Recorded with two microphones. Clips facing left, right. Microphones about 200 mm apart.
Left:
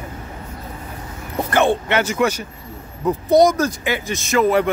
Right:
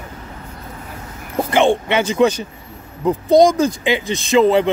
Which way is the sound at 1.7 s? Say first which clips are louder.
Right 2 dB; 15° right (ahead or behind).